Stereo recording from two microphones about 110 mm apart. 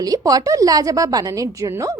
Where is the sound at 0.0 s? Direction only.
35° right (ahead or behind).